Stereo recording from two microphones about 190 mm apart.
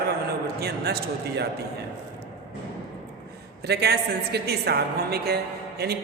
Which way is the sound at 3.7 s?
60° right (ahead or behind).